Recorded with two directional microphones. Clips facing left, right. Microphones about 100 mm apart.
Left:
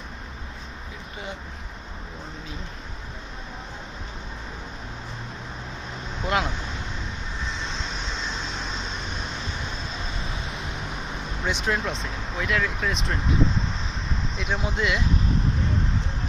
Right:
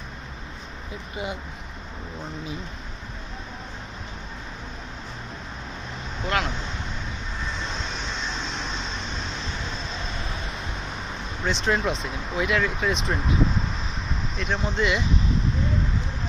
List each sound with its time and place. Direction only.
6.2 s speech: 20° left (ahead or behind)
11.4 s speech: 10° left (ahead or behind)
11.7 s speech: centre (ahead or behind)
14.3 s speech: 10° left (ahead or behind)